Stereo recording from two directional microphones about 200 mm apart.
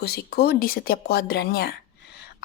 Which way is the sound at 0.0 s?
50° left (ahead or behind).